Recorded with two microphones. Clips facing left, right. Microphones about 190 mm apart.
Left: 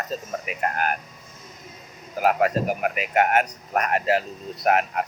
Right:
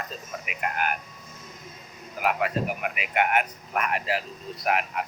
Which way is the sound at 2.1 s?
40° left (ahead or behind).